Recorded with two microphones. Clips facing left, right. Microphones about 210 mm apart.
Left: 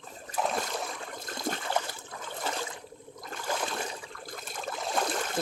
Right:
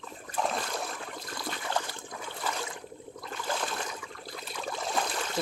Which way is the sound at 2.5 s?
25° left (ahead or behind).